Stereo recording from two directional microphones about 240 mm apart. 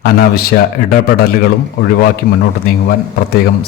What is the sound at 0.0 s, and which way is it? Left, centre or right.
A man's voice, left.